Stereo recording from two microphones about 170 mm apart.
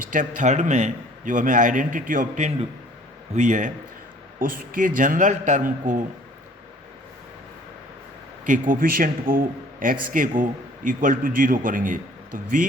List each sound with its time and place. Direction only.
0.1 s a man's voice: 50° right (ahead or behind)
8.4 s a man's voice: 50° right (ahead or behind)